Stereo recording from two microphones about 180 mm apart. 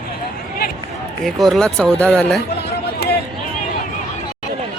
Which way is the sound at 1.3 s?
Centre (ahead or behind).